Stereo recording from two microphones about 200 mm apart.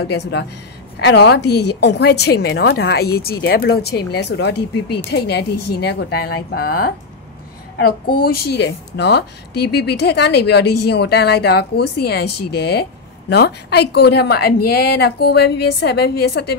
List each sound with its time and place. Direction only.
0.1 s speech: 60° left (ahead or behind)